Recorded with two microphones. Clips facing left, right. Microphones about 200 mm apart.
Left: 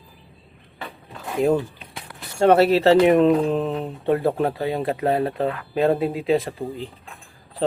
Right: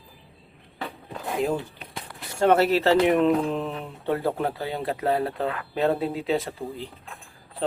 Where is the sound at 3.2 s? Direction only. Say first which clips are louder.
Left 4 dB; 35° left (ahead or behind).